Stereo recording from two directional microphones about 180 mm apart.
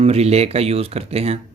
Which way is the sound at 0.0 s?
35° right (ahead or behind).